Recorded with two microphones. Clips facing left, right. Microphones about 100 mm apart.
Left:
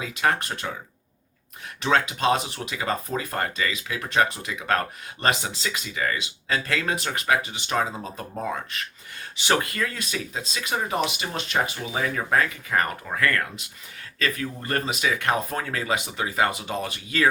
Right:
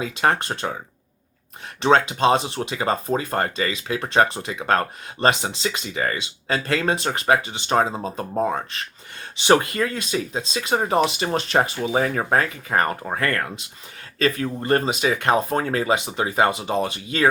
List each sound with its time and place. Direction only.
0.0 s speech: 30° right (ahead or behind)
1.8 s speech: 30° right (ahead or behind)